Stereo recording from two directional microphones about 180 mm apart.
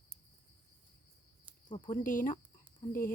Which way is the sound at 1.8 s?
50° left (ahead or behind).